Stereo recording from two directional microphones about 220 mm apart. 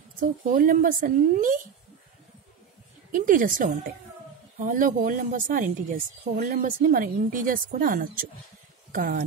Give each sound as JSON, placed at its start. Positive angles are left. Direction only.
{"t": 0.2, "sound": "speech", "side_deg": -40}
{"t": 3.1, "sound": "speech", "side_deg": -40}